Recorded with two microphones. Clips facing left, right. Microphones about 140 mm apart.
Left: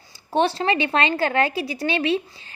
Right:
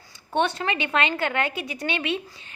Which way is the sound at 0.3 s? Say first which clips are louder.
Left 4 dB; 30° left (ahead or behind).